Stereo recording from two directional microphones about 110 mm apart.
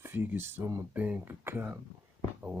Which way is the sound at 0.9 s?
15° right (ahead or behind).